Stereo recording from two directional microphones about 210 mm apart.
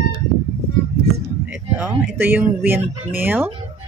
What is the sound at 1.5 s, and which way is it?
Speech, 5° right (ahead or behind).